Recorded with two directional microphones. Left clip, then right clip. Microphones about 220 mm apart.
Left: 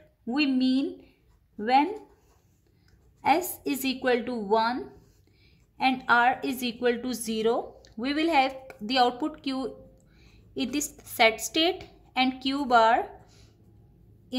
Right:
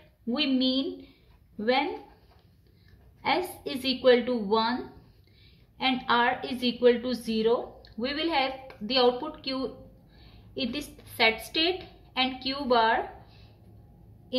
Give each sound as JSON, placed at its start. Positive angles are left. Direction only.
{"t": 0.3, "sound": "a woman's voice", "side_deg": 50}
{"t": 3.2, "sound": "a sound", "side_deg": 55}
{"t": 3.6, "sound": "a woman's voice", "side_deg": 55}
{"t": 5.8, "sound": "a woman's voice", "side_deg": 55}